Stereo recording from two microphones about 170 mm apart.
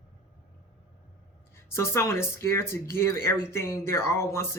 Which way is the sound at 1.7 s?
15° left (ahead or behind).